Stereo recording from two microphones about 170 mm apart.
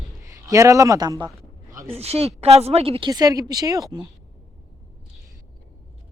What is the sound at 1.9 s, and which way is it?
Speech, 35° right (ahead or behind).